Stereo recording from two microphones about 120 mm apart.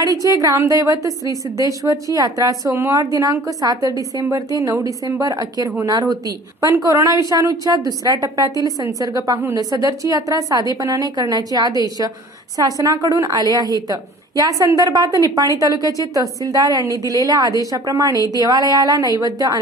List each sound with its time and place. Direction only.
0.0 s a woman's voice: 30° right (ahead or behind)